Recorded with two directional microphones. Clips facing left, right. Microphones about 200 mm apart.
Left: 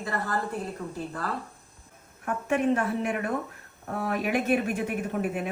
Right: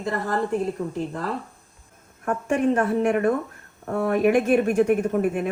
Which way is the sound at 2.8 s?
45° right (ahead or behind).